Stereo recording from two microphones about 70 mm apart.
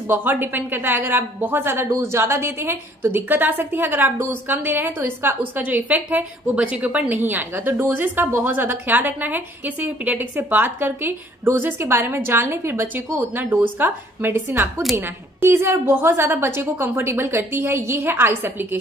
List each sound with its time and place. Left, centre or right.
0.1 s a woman's voice: right